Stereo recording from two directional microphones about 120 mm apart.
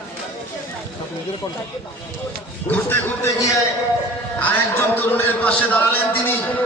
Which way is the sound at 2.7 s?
20° left (ahead or behind).